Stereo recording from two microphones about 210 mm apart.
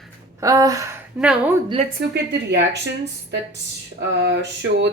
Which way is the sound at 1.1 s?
5° right (ahead or behind).